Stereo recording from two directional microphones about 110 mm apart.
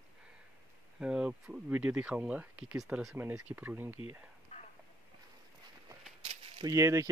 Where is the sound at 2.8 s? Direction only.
Centre (ahead or behind).